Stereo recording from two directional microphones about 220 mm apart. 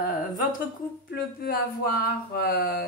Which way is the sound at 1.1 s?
45° left (ahead or behind).